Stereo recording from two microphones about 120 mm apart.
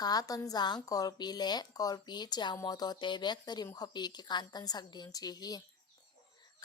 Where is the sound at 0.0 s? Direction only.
30° left (ahead or behind).